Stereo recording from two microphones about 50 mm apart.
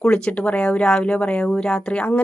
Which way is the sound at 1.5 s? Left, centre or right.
Centre.